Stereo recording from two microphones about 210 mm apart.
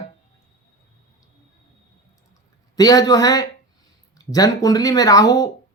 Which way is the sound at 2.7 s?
15° left (ahead or behind).